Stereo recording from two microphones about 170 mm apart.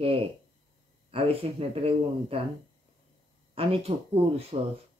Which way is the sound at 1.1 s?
35° right (ahead or behind).